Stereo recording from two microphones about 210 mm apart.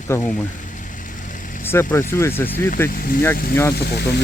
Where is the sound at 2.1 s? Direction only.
10° left (ahead or behind).